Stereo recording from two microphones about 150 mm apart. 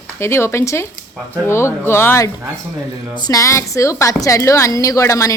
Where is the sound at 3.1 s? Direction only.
25° left (ahead or behind).